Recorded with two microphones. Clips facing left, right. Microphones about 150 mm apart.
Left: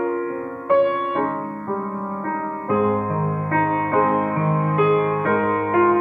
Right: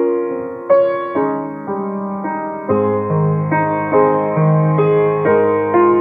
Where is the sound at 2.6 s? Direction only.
45° right (ahead or behind).